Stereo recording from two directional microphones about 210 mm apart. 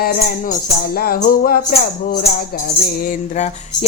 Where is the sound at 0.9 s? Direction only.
45° left (ahead or behind).